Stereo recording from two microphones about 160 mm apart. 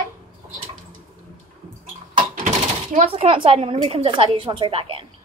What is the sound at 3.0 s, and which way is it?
A woman's voice, 40° right (ahead or behind).